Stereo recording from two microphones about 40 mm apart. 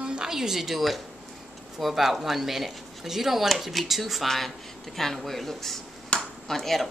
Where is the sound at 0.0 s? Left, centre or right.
Right.